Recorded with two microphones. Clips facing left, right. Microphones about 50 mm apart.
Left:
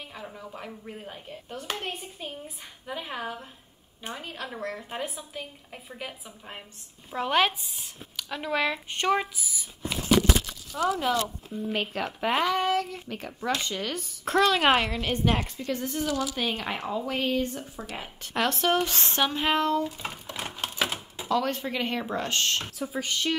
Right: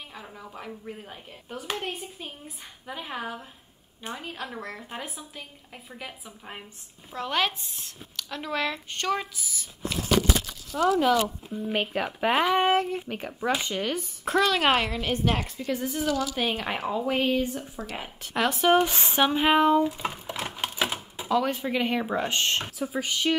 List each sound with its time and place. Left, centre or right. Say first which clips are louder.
0.1 s speech: left 1 dB; centre
7.1 s speech: left 3 dB; centre
11.4 s speech: right 2 dB; centre
12.5 s speech: right 4 dB; right
13.0 s speech: right 3 dB; centre
18.8 s speech: right 3 dB; centre
20.3 s typewriter: left 2 dB; centre
21.2 s speech: right 1 dB; centre
22.8 s speech: right 2 dB; centre